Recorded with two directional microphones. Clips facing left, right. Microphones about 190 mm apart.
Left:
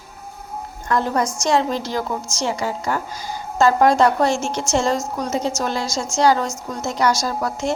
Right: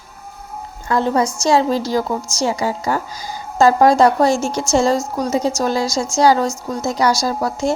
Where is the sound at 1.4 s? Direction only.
35° right (ahead or behind).